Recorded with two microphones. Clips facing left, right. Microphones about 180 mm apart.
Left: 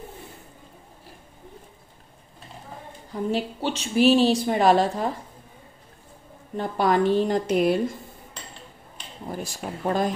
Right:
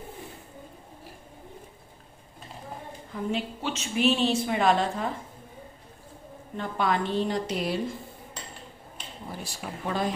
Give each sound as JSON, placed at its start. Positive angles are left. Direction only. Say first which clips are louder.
{"t": 3.1, "sound": "a woman's voice", "louder": "left 4 dB", "side_deg": 35}
{"t": 6.5, "sound": "a woman's voice", "louder": "left 5 dB", "side_deg": 40}
{"t": 9.3, "sound": "speech", "louder": "left 6 dB", "side_deg": 45}